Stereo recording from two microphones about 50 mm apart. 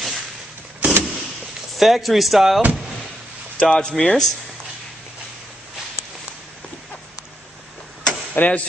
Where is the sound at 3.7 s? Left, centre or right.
Centre.